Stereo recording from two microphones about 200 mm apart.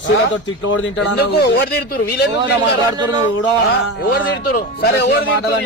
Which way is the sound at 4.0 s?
50° left (ahead or behind).